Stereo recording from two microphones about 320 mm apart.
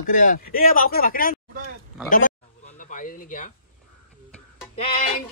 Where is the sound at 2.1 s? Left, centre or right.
Left.